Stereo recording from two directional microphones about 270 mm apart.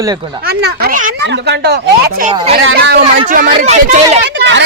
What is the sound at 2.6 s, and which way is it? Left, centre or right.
A woman's voice, right.